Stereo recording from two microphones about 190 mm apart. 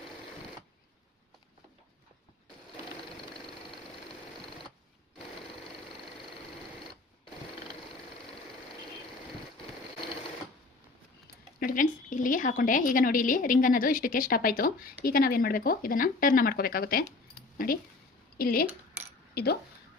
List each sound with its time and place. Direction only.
11.6 s a woman's voice: 45° left (ahead or behind)
18.3 s speech: 50° left (ahead or behind)